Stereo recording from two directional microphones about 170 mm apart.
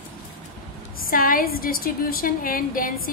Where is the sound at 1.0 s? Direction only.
55° left (ahead or behind).